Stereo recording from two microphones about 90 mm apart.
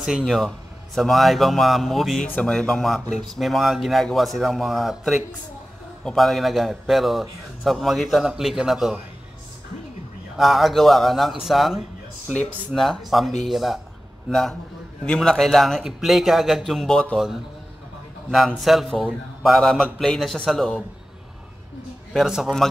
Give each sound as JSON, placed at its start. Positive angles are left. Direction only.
{"t": 0.2, "sound": "a man's voice", "side_deg": 5}
{"t": 2.2, "sound": "speech", "side_deg": 20}
{"t": 2.5, "sound": "a man's voice", "side_deg": 10}
{"t": 10.3, "sound": "a man's voice", "side_deg": 0}
{"t": 12.3, "sound": "speech", "side_deg": 15}
{"t": 12.7, "sound": "a man's voice", "side_deg": 0}
{"t": 18.3, "sound": "a man's voice", "side_deg": 0}
{"t": 22.1, "sound": "a man's voice", "side_deg": -5}